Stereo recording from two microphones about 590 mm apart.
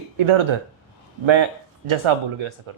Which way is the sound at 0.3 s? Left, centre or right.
Right.